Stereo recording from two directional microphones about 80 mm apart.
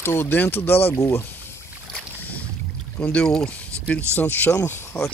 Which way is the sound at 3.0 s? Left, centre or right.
Centre.